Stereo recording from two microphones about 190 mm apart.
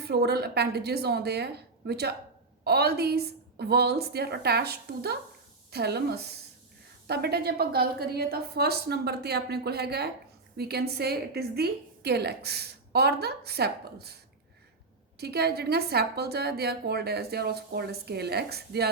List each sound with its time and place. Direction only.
0.0 s a woman's voice: 60° right (ahead or behind)
15.2 s a woman's voice: 55° right (ahead or behind)